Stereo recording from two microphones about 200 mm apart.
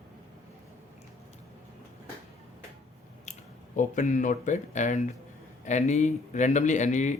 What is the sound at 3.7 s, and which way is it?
A man's voice, 40° left (ahead or behind).